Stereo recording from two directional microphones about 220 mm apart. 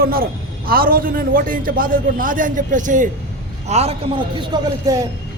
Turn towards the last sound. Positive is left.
turn(degrees=-15)  # may be behind; listen again after turning